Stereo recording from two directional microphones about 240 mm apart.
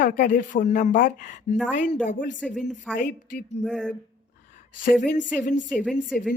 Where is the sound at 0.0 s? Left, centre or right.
Left.